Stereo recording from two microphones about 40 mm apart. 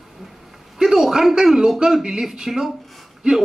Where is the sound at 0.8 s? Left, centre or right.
Centre.